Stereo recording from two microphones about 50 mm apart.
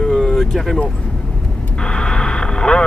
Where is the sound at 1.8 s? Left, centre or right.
Centre.